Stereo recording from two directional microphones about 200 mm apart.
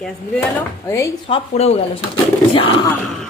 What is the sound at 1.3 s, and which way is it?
Speech, 30° left (ahead or behind).